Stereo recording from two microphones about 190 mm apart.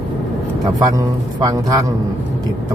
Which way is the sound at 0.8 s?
20° right (ahead or behind).